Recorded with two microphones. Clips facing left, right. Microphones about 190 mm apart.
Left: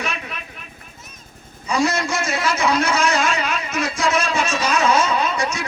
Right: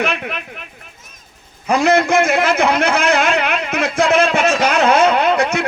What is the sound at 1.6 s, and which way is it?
A man's voice, 55° right (ahead or behind).